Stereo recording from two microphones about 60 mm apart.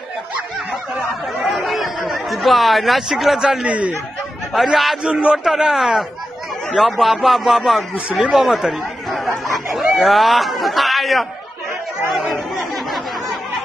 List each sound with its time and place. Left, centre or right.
1.5 s chatter: centre
3.6 s speech: right
4.6 s a man's voice: centre
5.0 s a man's voice: centre
8.1 s speech: centre
8.4 s speech: centre
9.5 s snicker: centre
9.9 s speech: centre